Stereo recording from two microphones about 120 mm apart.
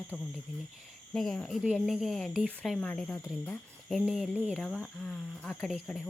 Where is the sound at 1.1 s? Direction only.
5° left (ahead or behind).